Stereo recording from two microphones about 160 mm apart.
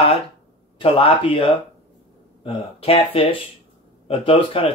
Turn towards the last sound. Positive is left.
turn(degrees=35)  # may be behind; listen again after turning